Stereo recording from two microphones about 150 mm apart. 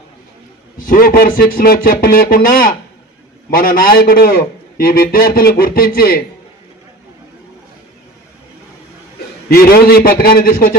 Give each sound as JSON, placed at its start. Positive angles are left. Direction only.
{"t": 0.8, "sound": "a man's voice", "side_deg": 70}
{"t": 9.5, "sound": "a man's voice", "side_deg": 90}